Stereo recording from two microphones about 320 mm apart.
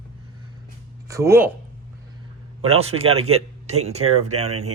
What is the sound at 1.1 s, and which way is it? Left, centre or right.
Speech, centre.